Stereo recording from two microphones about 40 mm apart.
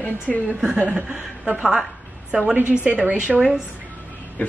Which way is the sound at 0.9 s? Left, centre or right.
Right.